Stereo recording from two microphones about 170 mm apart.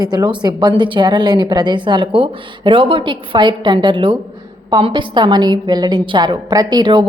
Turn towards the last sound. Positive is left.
turn(degrees=-25)  # may be behind; listen again after turning